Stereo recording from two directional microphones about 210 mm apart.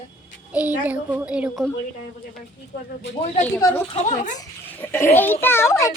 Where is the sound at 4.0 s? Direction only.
35° left (ahead or behind).